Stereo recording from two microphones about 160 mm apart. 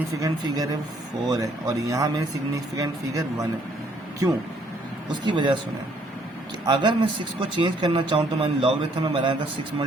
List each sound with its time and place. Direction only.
0.2 s speech: 25° right (ahead or behind)
5.2 s speech: 30° right (ahead or behind)
6.7 s speech: 30° right (ahead or behind)